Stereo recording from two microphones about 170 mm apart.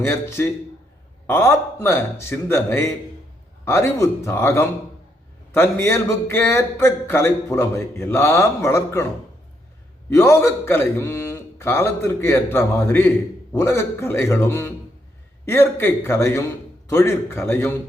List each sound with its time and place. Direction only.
0.0 s speech: 15° left (ahead or behind)
10.1 s speech: 15° left (ahead or behind)